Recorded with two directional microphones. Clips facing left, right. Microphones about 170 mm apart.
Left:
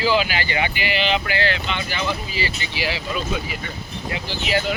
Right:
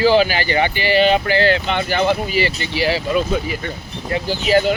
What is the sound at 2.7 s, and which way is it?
Speech, 40° right (ahead or behind).